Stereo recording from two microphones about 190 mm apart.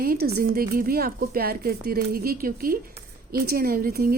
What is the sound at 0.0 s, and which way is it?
Speech, 55° right (ahead or behind).